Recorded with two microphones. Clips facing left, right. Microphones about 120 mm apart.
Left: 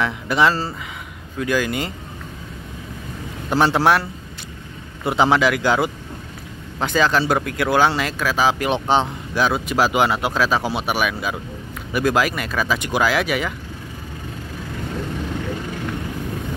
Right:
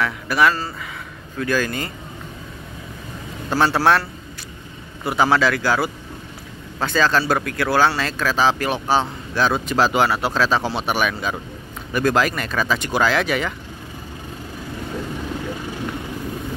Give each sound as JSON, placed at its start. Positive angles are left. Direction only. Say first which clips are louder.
{"t": 0.0, "sound": "speech", "louder": "even", "side_deg": 20}
{"t": 3.4, "sound": "speech", "louder": "left 1 dB", "side_deg": 15}
{"t": 5.0, "sound": "speech", "louder": "left 1 dB", "side_deg": 20}